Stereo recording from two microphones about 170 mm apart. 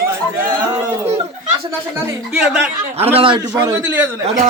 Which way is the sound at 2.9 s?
35° right (ahead or behind).